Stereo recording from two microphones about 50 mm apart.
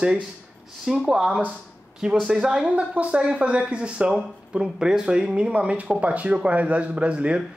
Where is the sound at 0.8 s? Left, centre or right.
Centre.